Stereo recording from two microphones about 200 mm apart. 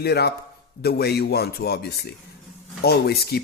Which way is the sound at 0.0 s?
55° left (ahead or behind).